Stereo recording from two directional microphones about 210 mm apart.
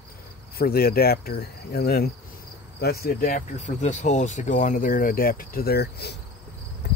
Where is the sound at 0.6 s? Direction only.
45° left (ahead or behind).